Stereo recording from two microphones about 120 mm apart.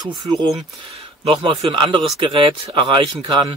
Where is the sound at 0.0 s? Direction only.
40° right (ahead or behind).